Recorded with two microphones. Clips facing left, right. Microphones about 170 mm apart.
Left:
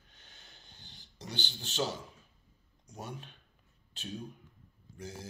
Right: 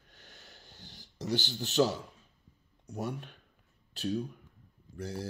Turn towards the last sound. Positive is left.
turn(degrees=-60)  # may be behind; listen again after turning